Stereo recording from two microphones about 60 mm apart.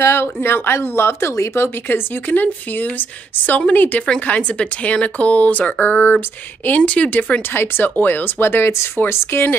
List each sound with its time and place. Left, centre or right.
0.0 s speech: left
7.5 s speech: left